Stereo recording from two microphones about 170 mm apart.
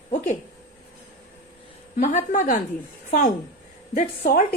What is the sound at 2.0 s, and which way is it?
A woman's voice, 45° left (ahead or behind).